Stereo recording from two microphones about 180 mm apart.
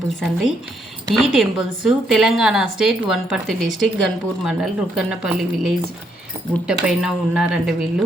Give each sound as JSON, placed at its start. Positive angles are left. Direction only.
{"t": 1.0, "sound": "a woman's voice", "side_deg": 0}